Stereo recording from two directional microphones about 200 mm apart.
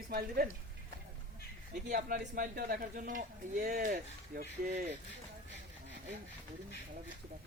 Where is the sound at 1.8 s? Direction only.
40° right (ahead or behind).